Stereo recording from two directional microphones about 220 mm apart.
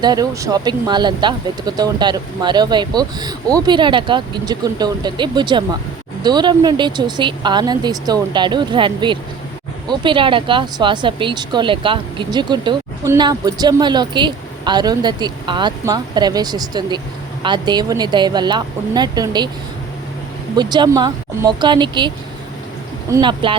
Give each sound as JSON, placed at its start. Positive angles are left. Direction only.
{"t": 0.0, "sound": "speech", "side_deg": -15}
{"t": 20.6, "sound": "speech", "side_deg": -20}